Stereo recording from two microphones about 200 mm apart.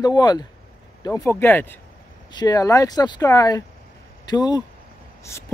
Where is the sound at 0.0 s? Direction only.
20° left (ahead or behind).